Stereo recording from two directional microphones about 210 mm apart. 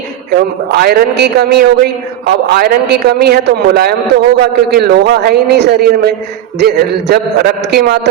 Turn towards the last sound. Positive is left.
turn(degrees=-50)  # may be behind; listen again after turning